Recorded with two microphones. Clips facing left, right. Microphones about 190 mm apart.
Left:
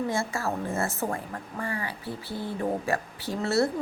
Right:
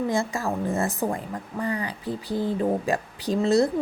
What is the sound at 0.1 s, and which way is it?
Speech, 15° right (ahead or behind).